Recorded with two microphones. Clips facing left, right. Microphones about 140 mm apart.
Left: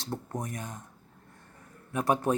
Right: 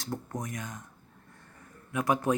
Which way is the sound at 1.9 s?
30° left (ahead or behind).